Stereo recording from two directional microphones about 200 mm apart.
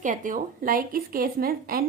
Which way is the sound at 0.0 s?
40° right (ahead or behind).